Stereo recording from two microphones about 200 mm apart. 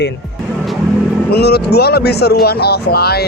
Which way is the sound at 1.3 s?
55° left (ahead or behind).